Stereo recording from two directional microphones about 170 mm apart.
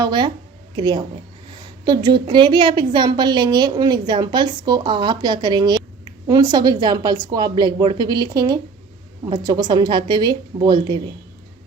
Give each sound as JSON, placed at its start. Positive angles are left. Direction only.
{"t": 0.0, "sound": "a woman's voice", "side_deg": -25}